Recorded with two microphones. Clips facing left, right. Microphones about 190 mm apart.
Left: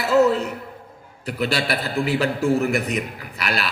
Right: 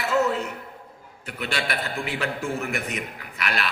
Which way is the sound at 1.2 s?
35° left (ahead or behind).